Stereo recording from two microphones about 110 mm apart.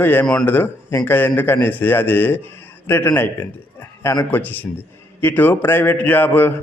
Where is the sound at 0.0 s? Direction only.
15° left (ahead or behind).